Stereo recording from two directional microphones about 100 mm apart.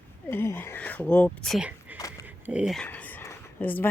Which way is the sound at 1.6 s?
15° right (ahead or behind).